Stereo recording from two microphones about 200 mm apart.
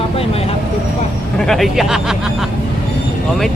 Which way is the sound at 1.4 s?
Centre (ahead or behind).